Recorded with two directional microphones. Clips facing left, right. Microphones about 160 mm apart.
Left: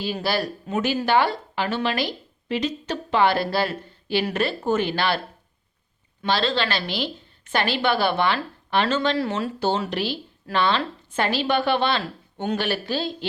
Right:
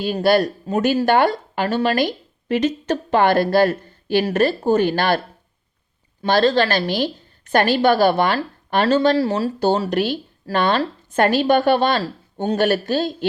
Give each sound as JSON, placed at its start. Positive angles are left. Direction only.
{"t": 0.0, "sound": "speech", "side_deg": -50}
{"t": 6.2, "sound": "speech", "side_deg": -45}